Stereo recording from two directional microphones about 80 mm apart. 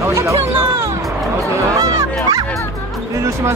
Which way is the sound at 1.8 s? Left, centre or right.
Right.